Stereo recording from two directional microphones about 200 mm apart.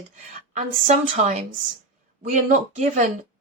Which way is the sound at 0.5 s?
40° right (ahead or behind).